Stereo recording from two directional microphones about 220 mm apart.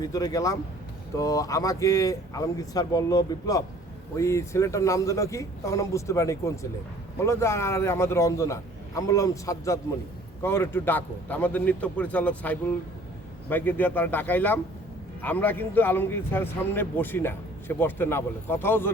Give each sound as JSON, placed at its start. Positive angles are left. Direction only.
{"t": 0.0, "sound": "a man's voice", "side_deg": 15}